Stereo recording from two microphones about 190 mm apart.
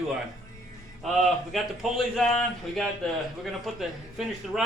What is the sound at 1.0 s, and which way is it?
A man's voice, centre (ahead or behind).